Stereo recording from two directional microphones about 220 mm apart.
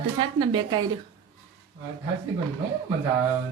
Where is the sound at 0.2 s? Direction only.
20° right (ahead or behind).